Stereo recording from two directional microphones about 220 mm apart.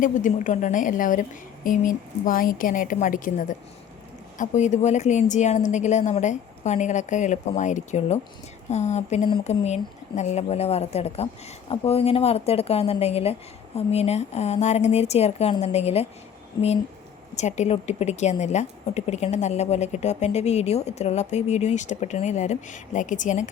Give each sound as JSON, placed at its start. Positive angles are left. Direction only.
{"t": 0.0, "sound": "a woman's voice", "side_deg": 35}
{"t": 17.3, "sound": "a woman's voice", "side_deg": 30}